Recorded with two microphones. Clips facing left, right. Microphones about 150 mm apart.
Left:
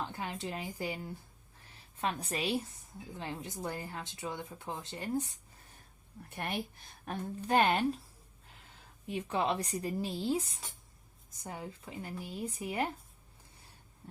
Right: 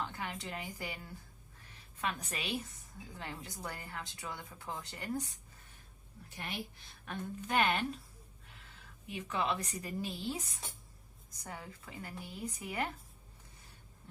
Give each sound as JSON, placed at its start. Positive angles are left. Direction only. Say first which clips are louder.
{"t": 0.0, "sound": "a woman's voice", "louder": "left 2 dB", "side_deg": 30}
{"t": 3.2, "sound": "a woman's voice", "louder": "left 5 dB", "side_deg": 25}
{"t": 6.2, "sound": "a woman's voice", "louder": "left 5 dB", "side_deg": 55}
{"t": 9.0, "sound": "a woman's voice", "louder": "left 3 dB", "side_deg": 35}